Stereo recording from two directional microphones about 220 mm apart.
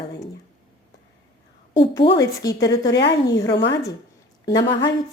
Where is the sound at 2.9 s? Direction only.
50° left (ahead or behind).